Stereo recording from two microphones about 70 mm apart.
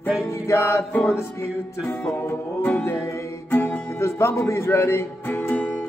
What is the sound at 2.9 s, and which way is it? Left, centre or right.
Music, left.